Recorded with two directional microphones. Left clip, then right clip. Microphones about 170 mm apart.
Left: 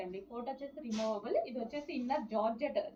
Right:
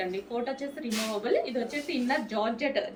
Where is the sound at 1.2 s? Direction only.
15° right (ahead or behind).